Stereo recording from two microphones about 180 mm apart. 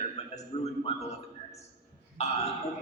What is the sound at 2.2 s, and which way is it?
Speech, 35° left (ahead or behind).